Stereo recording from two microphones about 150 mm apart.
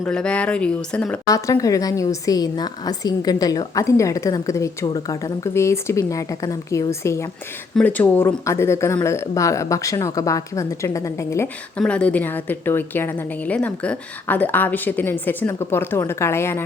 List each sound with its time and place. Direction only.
0.0 s a woman's voice: 5° left (ahead or behind)
1.3 s a woman's voice: 25° left (ahead or behind)
11.8 s a woman's voice: 5° left (ahead or behind)